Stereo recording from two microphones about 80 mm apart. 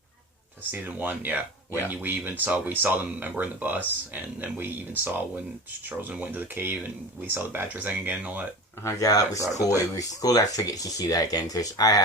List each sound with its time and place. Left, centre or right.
0.7 s speech: right
8.8 s speech: left